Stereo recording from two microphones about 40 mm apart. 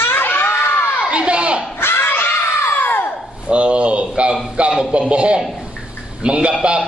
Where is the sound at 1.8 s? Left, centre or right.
Left.